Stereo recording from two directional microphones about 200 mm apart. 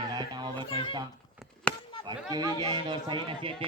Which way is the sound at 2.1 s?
20° right (ahead or behind).